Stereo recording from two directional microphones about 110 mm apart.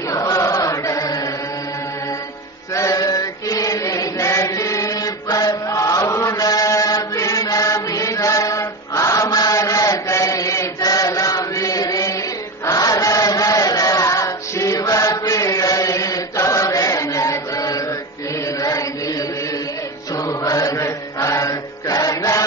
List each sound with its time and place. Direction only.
0.1 s chant: 30° left (ahead or behind)
2.7 s chant: 30° left (ahead or behind)
20.2 s chant: 30° left (ahead or behind)